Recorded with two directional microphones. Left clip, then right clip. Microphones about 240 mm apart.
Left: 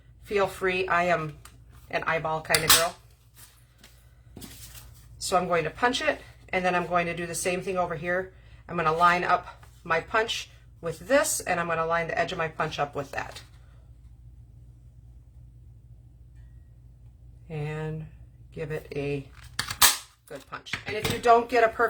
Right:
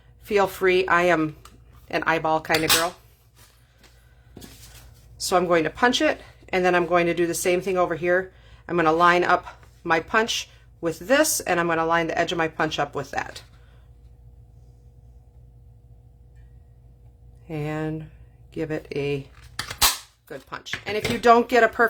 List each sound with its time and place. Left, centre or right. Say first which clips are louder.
0.3 s speech: right 6 dB; right
5.2 s speech: right 5 dB; right
17.5 s speech: right 6 dB; right
20.2 s speech: right 4 dB; right